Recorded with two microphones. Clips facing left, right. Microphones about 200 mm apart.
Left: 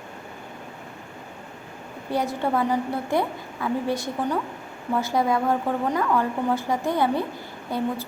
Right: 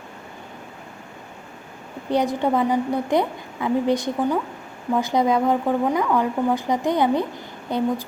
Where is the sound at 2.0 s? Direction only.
20° right (ahead or behind).